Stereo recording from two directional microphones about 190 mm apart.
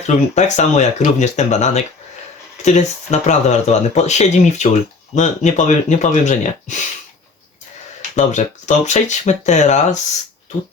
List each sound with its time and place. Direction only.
0.0 s speech: 35° left (ahead or behind)
8.1 s speech: 40° left (ahead or behind)